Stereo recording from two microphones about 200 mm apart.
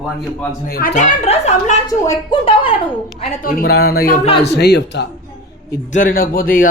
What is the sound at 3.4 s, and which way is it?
A man's voice, 50° left (ahead or behind).